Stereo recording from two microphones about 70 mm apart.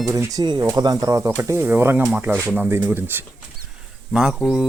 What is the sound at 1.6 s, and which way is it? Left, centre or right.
Speech, right.